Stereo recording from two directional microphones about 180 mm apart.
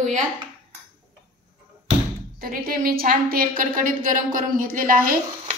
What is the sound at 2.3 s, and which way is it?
A woman's voice, 55° right (ahead or behind).